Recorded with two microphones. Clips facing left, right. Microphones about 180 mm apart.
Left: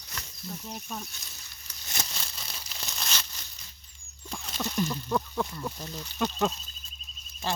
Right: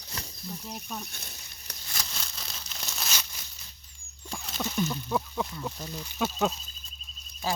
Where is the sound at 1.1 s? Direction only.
60° right (ahead or behind).